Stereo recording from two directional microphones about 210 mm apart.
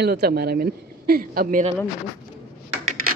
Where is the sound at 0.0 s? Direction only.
50° right (ahead or behind).